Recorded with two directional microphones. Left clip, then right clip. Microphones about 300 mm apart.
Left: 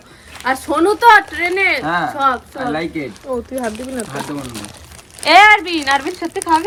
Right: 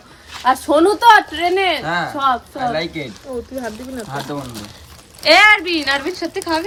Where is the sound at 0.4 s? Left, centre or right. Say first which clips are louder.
Right 2 dB; centre.